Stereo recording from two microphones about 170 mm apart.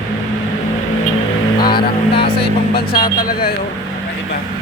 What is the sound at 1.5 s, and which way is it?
Vehicle, 25° left (ahead or behind).